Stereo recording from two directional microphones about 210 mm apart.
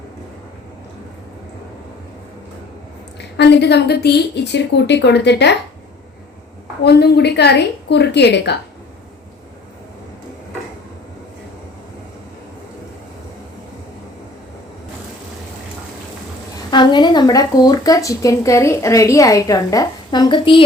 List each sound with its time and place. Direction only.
3.2 s a woman's voice: 55° left (ahead or behind)
6.8 s a woman's voice: 50° left (ahead or behind)
16.7 s speech: 20° left (ahead or behind)